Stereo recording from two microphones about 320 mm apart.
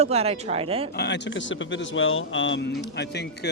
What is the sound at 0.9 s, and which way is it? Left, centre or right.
Speech, left.